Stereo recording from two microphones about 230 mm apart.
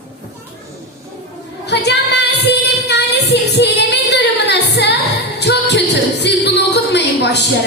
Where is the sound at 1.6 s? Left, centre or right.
Left.